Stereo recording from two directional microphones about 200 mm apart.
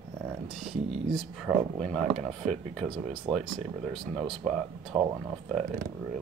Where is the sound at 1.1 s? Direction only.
Centre (ahead or behind).